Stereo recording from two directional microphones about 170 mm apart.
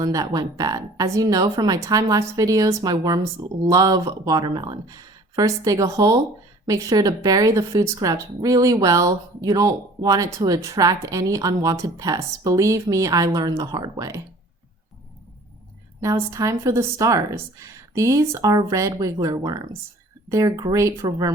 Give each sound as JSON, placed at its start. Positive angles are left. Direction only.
{"t": 0.0, "sound": "speech", "side_deg": -20}
{"t": 16.0, "sound": "speech", "side_deg": -15}